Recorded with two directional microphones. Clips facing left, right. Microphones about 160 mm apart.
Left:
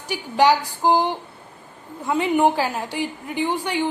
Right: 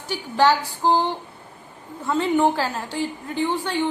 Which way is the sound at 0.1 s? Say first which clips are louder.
Left 1 dB; 15° left (ahead or behind).